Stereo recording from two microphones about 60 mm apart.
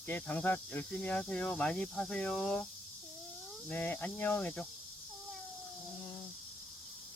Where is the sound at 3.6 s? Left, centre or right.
Left.